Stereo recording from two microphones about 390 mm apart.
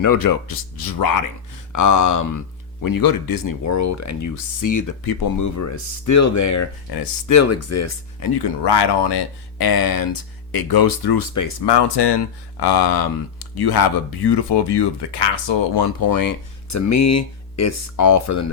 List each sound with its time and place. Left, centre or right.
0.0 s speech: left
1.7 s speech: left
2.8 s speech: left
7.3 s speech: left
8.2 s speech: left